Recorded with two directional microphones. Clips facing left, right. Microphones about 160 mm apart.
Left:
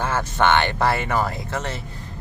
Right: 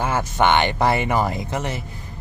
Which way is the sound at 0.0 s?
10° right (ahead or behind).